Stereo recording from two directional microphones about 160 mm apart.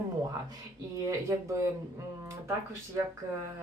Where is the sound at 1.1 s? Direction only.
20° right (ahead or behind).